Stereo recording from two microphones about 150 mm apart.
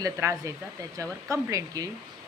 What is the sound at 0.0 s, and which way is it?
Speech, 20° right (ahead or behind).